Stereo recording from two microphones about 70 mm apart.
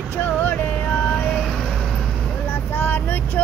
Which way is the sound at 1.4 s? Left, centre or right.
Centre.